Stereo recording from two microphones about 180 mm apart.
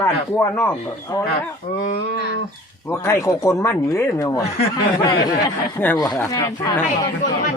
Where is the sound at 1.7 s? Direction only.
40° left (ahead or behind).